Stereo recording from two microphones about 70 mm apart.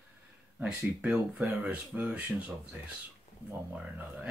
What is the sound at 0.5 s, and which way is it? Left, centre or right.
Speech, centre.